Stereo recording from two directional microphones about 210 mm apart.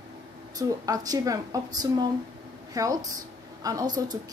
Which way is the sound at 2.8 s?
15° right (ahead or behind).